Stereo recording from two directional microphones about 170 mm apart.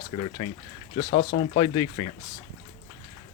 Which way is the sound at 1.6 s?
25° left (ahead or behind).